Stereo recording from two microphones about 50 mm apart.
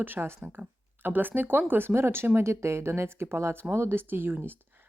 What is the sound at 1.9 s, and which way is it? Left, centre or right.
Speech, right.